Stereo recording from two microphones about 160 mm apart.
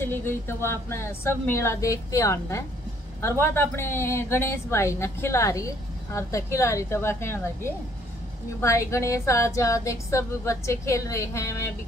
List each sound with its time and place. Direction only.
0.0 s a woman's voice: 15° left (ahead or behind)